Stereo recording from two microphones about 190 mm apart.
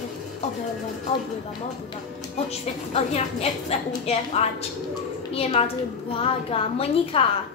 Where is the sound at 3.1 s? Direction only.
35° left (ahead or behind).